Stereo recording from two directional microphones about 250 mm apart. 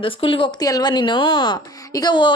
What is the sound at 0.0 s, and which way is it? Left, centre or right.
Speech, left.